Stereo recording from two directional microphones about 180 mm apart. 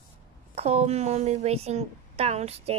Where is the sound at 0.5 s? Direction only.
35° right (ahead or behind).